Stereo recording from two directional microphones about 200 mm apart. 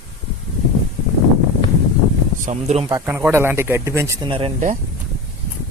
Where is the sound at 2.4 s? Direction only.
35° right (ahead or behind).